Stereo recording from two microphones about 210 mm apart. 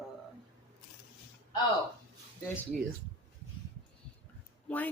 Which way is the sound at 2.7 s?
40° right (ahead or behind).